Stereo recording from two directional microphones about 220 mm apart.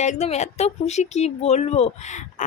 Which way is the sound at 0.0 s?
30° left (ahead or behind).